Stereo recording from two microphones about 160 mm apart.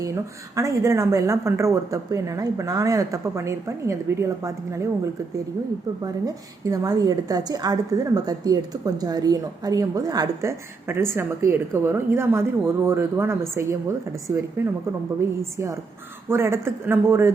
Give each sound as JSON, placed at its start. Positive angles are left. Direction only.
{"t": 0.0, "sound": "a woman's voice", "side_deg": -20}
{"t": 6.0, "sound": "a woman's voice", "side_deg": -20}